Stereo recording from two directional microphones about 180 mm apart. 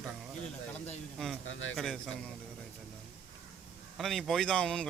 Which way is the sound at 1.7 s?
Centre (ahead or behind).